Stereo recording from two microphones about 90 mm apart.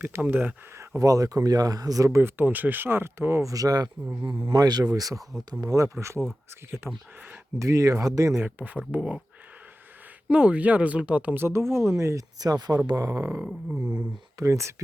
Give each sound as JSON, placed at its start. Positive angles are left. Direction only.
{"t": 0.0, "sound": "speech", "side_deg": -20}
{"t": 0.9, "sound": "speech", "side_deg": -40}
{"t": 2.0, "sound": "speech", "side_deg": -25}
{"t": 3.5, "sound": "speech", "side_deg": -45}
{"t": 8.4, "sound": "speech", "side_deg": -20}
{"t": 10.2, "sound": "speech", "side_deg": -10}
{"t": 11.4, "sound": "speech", "side_deg": -30}